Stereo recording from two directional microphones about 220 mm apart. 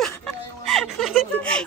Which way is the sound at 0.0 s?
5° left (ahead or behind).